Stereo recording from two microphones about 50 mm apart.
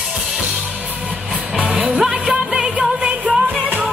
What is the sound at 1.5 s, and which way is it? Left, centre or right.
Music, centre.